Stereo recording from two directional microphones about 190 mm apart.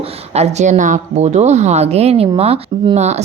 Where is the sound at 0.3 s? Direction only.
35° right (ahead or behind).